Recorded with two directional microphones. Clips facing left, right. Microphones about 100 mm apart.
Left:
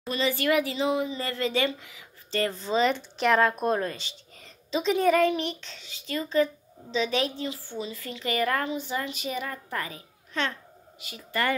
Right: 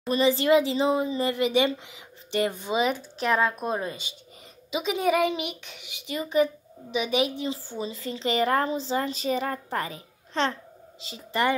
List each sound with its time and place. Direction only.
0.1 s a woman's voice: 25° right (ahead or behind)
1.2 s speech: 20° right (ahead or behind)
7.7 s a woman's voice: 25° right (ahead or behind)